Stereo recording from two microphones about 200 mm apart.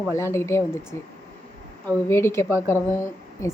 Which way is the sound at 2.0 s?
10° left (ahead or behind).